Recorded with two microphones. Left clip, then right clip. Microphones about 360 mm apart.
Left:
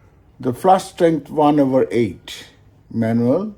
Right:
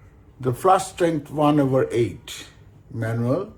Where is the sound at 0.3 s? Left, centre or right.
Left.